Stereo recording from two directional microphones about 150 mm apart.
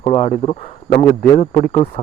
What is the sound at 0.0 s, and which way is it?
Speech, 45° left (ahead or behind).